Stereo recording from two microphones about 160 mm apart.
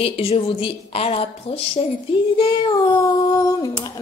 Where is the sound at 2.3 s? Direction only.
30° left (ahead or behind).